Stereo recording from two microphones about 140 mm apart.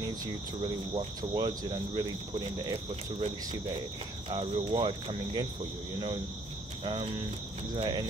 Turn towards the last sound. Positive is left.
turn(degrees=-35)  # may be behind; listen again after turning